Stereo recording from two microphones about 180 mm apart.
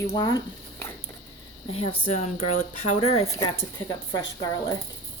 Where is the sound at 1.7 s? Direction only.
35° left (ahead or behind).